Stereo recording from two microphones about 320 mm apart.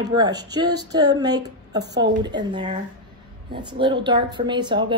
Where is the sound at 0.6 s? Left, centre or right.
Right.